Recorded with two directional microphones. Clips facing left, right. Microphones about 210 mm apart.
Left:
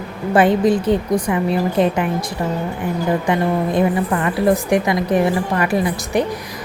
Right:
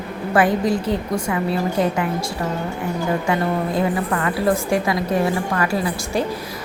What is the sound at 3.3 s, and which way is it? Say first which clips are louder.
A woman's voice: left 3 dB; 20° left (ahead or behind).